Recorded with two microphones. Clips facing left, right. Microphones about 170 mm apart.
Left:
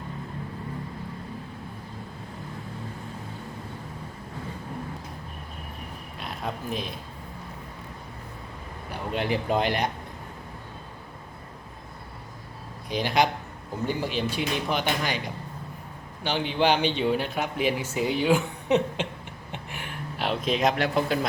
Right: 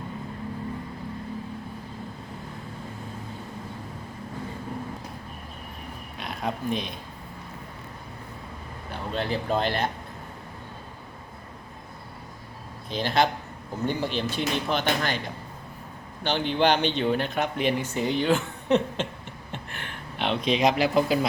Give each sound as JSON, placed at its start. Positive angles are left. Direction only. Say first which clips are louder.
{"t": 6.1, "sound": "speech", "louder": "right 3 dB", "side_deg": 0}
{"t": 8.9, "sound": "a man's voice", "louder": "left 1 dB", "side_deg": 15}
{"t": 12.9, "sound": "speech", "louder": "even", "side_deg": 15}
{"t": 16.2, "sound": "speech", "louder": "right 1 dB", "side_deg": 5}
{"t": 19.5, "sound": "a sound", "louder": "left 1 dB", "side_deg": 10}